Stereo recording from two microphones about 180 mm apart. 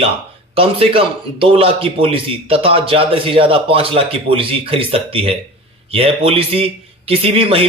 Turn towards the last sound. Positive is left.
turn(degrees=-30)  # may be behind; listen again after turning